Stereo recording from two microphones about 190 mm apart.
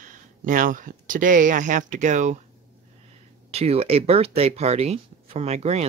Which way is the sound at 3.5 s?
35° right (ahead or behind).